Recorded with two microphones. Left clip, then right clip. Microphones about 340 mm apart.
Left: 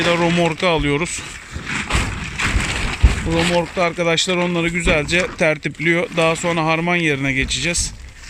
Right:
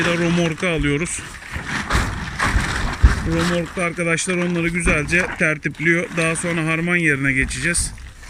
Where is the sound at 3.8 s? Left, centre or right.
Centre.